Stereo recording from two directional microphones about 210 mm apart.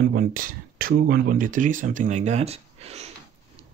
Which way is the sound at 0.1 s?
40° right (ahead or behind).